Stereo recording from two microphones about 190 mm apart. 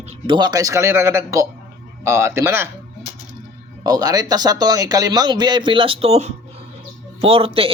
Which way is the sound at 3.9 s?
20° right (ahead or behind).